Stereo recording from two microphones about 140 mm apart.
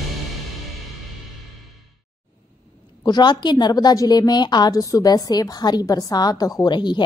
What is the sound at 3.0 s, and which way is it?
A woman's voice, 30° left (ahead or behind).